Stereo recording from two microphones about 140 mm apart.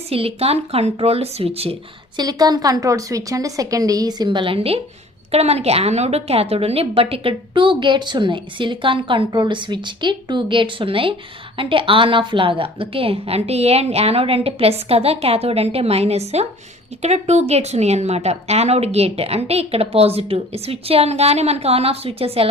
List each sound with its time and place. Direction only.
0.1 s speech: 45° right (ahead or behind)
2.1 s a woman's voice: 30° right (ahead or behind); by 22.4 s 45° right (ahead or behind)